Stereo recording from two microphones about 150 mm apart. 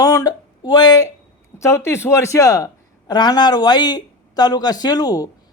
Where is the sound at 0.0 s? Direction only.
25° left (ahead or behind).